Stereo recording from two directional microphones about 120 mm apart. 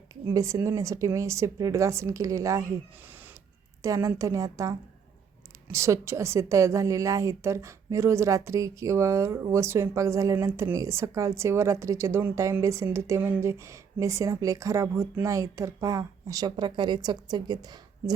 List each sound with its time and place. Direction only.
0.3 s a woman's voice: 25° right (ahead or behind)
3.8 s a woman's voice: 25° right (ahead or behind)